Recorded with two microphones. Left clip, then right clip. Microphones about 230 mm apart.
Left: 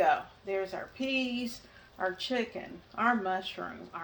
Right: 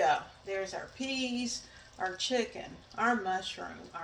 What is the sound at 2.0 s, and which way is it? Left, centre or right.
Speech, left.